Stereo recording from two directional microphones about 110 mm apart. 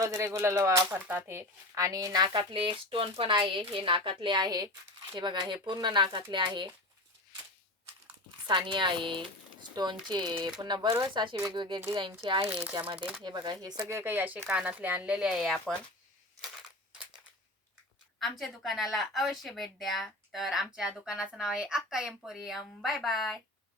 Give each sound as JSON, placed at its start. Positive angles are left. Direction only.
{"t": 0.0, "sound": "speech", "side_deg": -30}
{"t": 0.9, "sound": "speech", "side_deg": -15}
{"t": 8.4, "sound": "speech", "side_deg": -45}
{"t": 11.1, "sound": "speech", "side_deg": -45}
{"t": 12.5, "sound": "speech", "side_deg": -20}
{"t": 12.8, "sound": "speech", "side_deg": -50}
{"t": 13.8, "sound": "speech", "side_deg": -20}
{"t": 18.2, "sound": "speech", "side_deg": 0}